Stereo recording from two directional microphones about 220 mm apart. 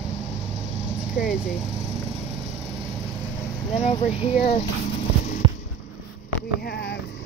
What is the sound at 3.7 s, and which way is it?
Speech, 25° left (ahead or behind).